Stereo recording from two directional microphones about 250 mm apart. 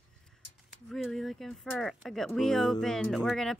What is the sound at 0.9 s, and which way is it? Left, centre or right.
Speech, centre.